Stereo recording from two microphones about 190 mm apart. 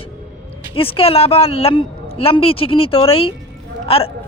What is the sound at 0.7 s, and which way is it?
Speech, 30° left (ahead or behind).